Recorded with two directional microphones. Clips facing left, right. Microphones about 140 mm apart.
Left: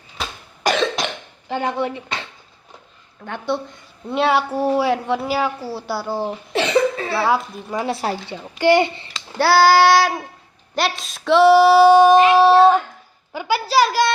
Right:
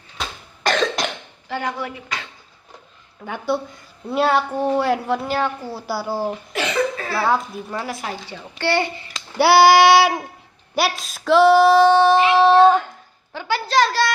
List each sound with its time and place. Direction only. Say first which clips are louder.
0.6 s cough: left 1 dB; 5° left (ahead or behind)
1.5 s speech: left 4 dB; 25° left (ahead or behind)
3.2 s a woman's voice: right 1 dB; 5° right (ahead or behind)
6.5 s cough: left 7 dB; 25° left (ahead or behind)
7.2 s a woman's voice: even; 5° left (ahead or behind)
7.9 s speech: left 6 dB; 30° left (ahead or behind)
8.4 s a woman's voice: left 6 dB; 15° left (ahead or behind)
9.4 s a sound: right 1 dB; 15° right (ahead or behind)
10.8 s a woman's voice: right 1 dB; 5° right (ahead or behind)